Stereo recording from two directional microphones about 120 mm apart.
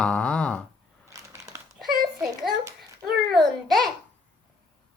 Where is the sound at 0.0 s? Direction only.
10° left (ahead or behind).